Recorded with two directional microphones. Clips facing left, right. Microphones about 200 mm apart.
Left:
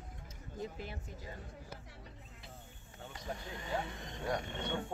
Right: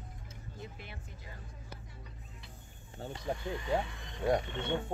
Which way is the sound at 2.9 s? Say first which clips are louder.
Right 8 dB; 30° right (ahead or behind).